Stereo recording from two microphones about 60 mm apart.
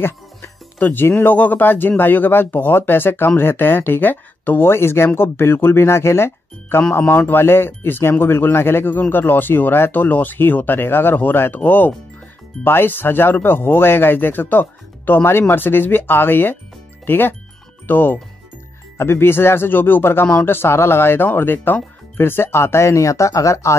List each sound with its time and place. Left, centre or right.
0.7 s speech: left
18.9 s speech: left